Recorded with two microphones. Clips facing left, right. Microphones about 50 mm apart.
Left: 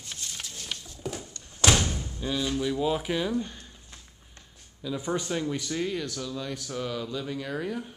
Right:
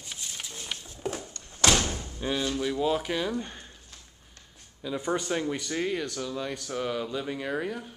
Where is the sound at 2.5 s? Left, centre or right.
Centre.